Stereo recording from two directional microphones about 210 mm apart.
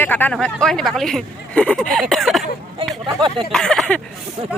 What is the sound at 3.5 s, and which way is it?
Speech, centre (ahead or behind).